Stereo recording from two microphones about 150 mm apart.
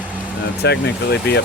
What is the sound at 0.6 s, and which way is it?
Speech, 90° left.